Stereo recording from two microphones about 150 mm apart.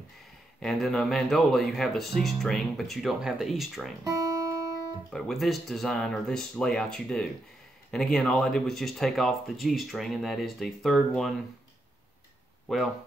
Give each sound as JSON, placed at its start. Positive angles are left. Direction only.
{"t": 0.6, "sound": "speech", "side_deg": 0}
{"t": 4.0, "sound": "guitar", "side_deg": -20}
{"t": 5.1, "sound": "speech", "side_deg": 0}
{"t": 12.6, "sound": "speech", "side_deg": 0}